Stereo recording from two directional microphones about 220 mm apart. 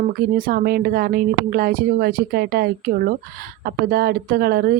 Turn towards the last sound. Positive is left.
turn(degrees=-45)  # may be behind; listen again after turning